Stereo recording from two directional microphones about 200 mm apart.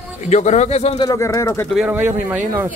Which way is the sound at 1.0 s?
15° left (ahead or behind).